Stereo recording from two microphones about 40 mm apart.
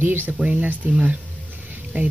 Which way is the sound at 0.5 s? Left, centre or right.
Right.